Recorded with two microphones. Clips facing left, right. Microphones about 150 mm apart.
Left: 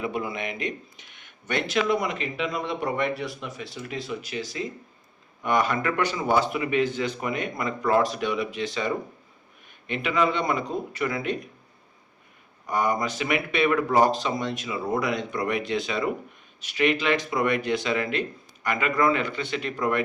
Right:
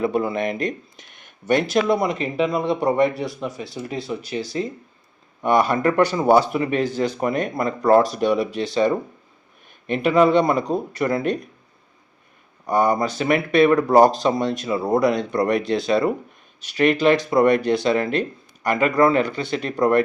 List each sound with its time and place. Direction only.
0.0 s speech: 35° right (ahead or behind)
12.6 s speech: 35° right (ahead or behind)